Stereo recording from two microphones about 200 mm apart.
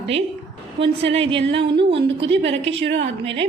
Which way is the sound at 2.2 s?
65° right (ahead or behind).